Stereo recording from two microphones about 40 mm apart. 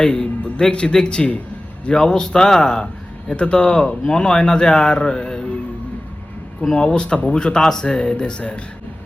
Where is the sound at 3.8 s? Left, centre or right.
Centre.